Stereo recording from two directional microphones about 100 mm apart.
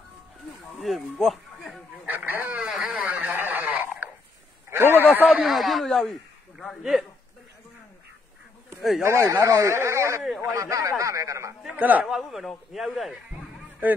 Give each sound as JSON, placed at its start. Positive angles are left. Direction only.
{"t": 0.7, "sound": "speech", "side_deg": 0}
{"t": 1.2, "sound": "a sound", "side_deg": 0}
{"t": 2.0, "sound": "a sound", "side_deg": -20}
{"t": 3.0, "sound": "radio", "side_deg": -15}
{"t": 4.6, "sound": "a sound", "side_deg": -20}
{"t": 5.1, "sound": "speech", "side_deg": -15}
{"t": 5.4, "sound": "speech", "side_deg": 0}
{"t": 9.0, "sound": "a man's voice", "side_deg": -30}
{"t": 11.7, "sound": "speech", "side_deg": -15}
{"t": 12.1, "sound": "speech", "side_deg": 0}